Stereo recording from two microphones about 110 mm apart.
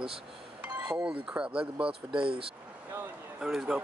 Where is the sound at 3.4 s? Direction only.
5° right (ahead or behind).